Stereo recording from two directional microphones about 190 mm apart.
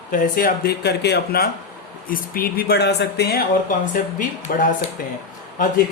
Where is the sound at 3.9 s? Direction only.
45° left (ahead or behind).